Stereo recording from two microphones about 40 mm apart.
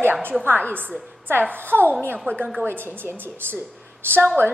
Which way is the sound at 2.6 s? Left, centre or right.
Right.